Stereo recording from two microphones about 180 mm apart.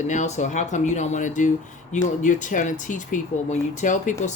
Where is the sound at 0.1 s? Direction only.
40° left (ahead or behind).